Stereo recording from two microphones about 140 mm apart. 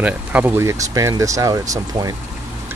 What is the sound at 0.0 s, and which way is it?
Speech, 10° right (ahead or behind).